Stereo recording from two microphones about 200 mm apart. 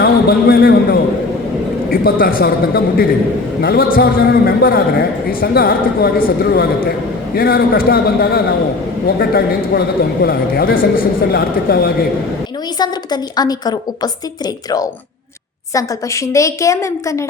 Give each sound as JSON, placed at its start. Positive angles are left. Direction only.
{"t": 0.0, "sound": "a man's voice", "side_deg": 50}
{"t": 12.8, "sound": "a woman's voice", "side_deg": 20}